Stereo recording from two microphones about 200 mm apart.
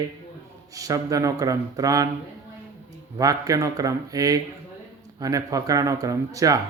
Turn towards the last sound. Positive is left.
turn(degrees=-15)  # may be behind; listen again after turning